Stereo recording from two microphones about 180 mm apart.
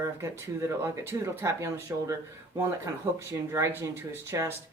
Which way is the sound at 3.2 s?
15° right (ahead or behind).